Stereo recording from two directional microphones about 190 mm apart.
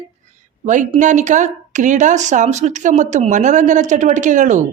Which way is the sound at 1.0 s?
40° right (ahead or behind).